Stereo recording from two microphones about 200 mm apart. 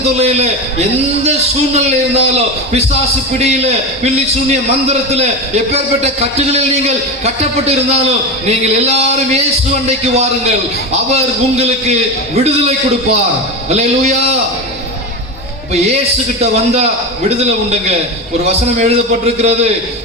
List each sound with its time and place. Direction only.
0.2 s a man's voice: 35° right (ahead or behind)
1.7 s a man's voice: 30° right (ahead or behind)
16.4 s a man's voice: 30° right (ahead or behind)